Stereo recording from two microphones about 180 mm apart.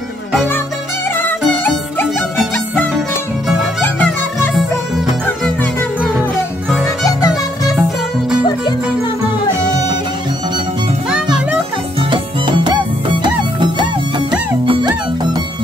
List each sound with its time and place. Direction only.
1.6 s music: 10° left (ahead or behind)
7.1 s music: 20° left (ahead or behind)
11.1 s music: 5° right (ahead or behind)
12.0 s music: 25° right (ahead or behind)
14.7 s music: 20° right (ahead or behind)